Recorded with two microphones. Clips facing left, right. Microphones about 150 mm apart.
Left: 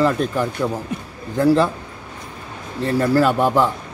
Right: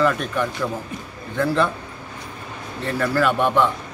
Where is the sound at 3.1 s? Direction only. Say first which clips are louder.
Left 2 dB; 35° left (ahead or behind).